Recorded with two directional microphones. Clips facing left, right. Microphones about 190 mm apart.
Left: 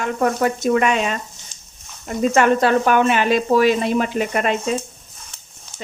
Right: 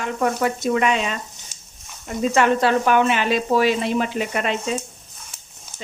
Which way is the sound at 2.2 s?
50° left (ahead or behind).